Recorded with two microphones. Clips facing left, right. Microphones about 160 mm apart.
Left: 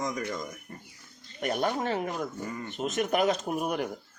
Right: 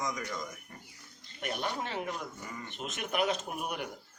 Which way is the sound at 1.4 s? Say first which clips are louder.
Left 7 dB; 45° left (ahead or behind).